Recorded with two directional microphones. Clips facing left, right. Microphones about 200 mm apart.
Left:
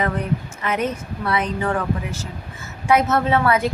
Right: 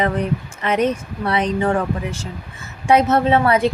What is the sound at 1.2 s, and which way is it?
A woman's voice, 30° right (ahead or behind).